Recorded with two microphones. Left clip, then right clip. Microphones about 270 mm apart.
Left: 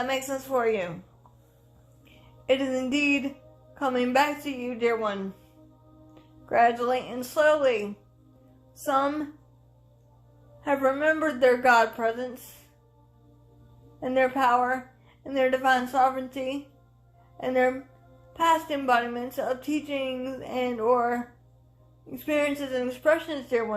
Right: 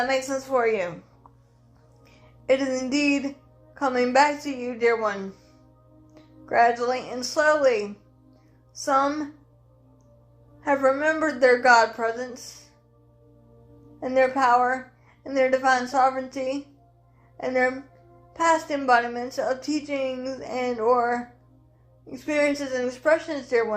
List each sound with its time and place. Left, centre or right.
0.3 s a woman's voice: left
2.5 s a woman's voice: left
6.4 s a woman's voice: left
8.8 s a woman's voice: left
10.6 s a woman's voice: left
14.0 s a woman's voice: left